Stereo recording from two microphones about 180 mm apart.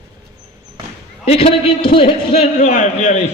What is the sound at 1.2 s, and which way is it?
A man's voice, 35° left (ahead or behind).